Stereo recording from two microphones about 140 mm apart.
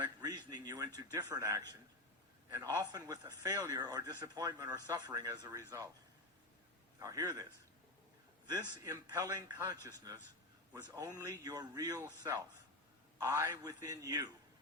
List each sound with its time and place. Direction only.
0.2 s a sound: 30° right (ahead or behind)
1.1 s a man's voice: 20° right (ahead or behind)
7.0 s a man's voice: 25° right (ahead or behind)
8.7 s a man's voice: 25° right (ahead or behind)
13.1 s a man's voice: 20° right (ahead or behind)